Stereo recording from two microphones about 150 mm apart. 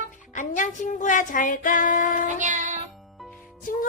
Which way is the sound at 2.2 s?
55° right (ahead or behind).